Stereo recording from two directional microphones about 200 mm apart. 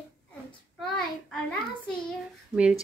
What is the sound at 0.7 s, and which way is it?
Speech, 5° left (ahead or behind).